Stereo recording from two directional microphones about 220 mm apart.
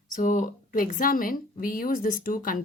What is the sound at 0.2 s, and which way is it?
Speech, 35° left (ahead or behind).